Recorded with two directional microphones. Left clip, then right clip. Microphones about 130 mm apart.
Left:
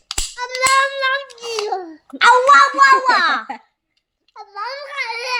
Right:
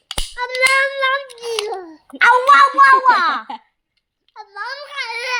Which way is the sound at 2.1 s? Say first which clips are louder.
Even; 10° left (ahead or behind).